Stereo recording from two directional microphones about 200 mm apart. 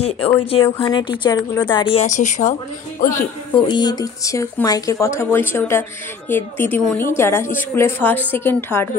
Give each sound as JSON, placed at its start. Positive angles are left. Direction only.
{"t": 0.4, "sound": "a woman's voice", "side_deg": 25}
{"t": 3.5, "sound": "speech", "side_deg": 20}